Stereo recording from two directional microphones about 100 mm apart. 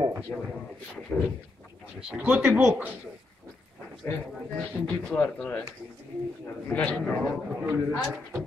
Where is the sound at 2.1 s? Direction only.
10° right (ahead or behind).